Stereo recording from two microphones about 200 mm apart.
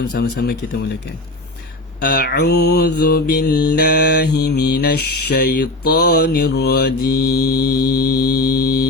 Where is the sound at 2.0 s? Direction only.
50° left (ahead or behind).